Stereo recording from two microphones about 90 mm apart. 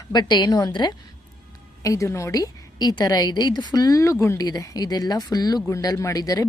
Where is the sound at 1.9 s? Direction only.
35° left (ahead or behind).